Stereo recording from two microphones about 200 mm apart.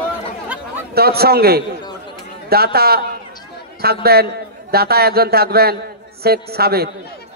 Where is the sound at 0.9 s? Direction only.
50° right (ahead or behind).